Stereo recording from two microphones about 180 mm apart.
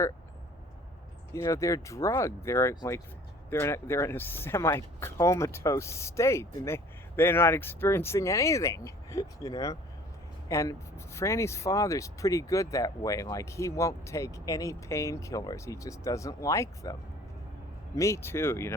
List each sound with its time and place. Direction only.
1.3 s speech: 15° left (ahead or behind)